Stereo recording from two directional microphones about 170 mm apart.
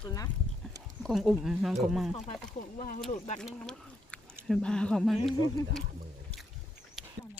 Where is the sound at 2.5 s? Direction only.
50° left (ahead or behind).